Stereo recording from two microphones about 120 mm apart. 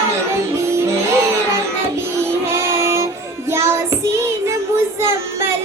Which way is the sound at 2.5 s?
20° right (ahead or behind).